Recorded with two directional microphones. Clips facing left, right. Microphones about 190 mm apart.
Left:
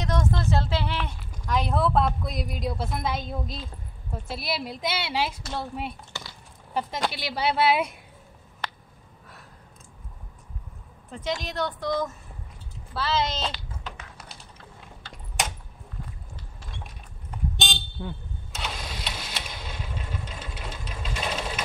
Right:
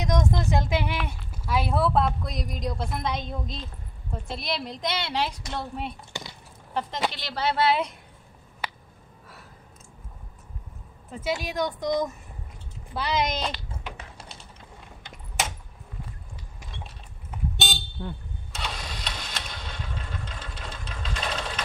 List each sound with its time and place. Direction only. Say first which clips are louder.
0.0 s speech: right 1 dB; 15° right (ahead or behind); by 7.9 s 10° left (ahead or behind)
8.6 s a sound: even; 5° right (ahead or behind)
11.1 s a woman's voice: right 1 dB; 5° right (ahead or behind)
15.0 s keys jangling: even; 15° right (ahead or behind)
17.3 s vehicle: even; 5° right (ahead or behind)